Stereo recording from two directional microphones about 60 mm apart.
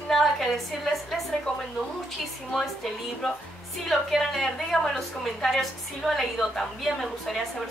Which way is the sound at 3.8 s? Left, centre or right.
Centre.